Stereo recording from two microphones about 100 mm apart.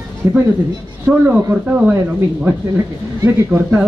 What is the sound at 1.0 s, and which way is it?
Speech, 20° right (ahead or behind).